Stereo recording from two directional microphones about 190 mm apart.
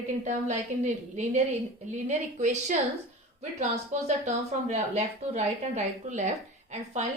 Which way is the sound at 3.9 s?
40° right (ahead or behind).